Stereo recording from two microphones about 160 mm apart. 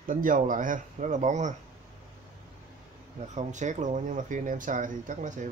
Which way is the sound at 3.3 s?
50° right (ahead or behind).